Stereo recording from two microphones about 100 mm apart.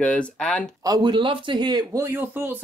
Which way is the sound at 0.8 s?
40° right (ahead or behind).